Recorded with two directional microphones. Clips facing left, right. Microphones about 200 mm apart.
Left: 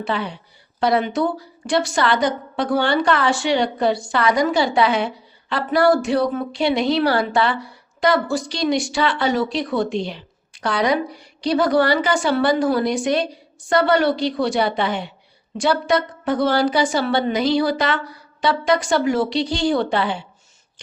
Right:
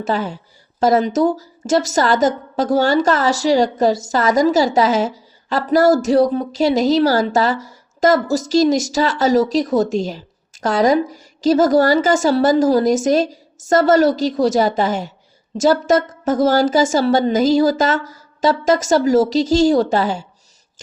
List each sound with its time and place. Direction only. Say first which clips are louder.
0.0 s a woman's voice: right 4 dB; 45° right (ahead or behind)